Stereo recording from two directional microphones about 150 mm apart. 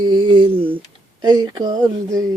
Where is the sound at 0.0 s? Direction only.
35° right (ahead or behind).